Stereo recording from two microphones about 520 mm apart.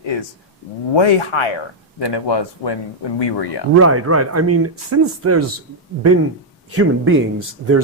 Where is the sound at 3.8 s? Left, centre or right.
Right.